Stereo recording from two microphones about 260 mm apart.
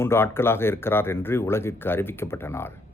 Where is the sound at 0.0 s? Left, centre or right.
Centre.